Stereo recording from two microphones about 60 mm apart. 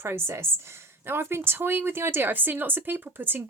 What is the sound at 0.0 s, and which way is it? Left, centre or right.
Speech, right.